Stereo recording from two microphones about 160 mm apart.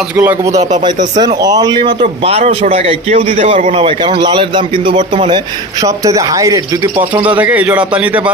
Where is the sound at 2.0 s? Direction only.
45° right (ahead or behind).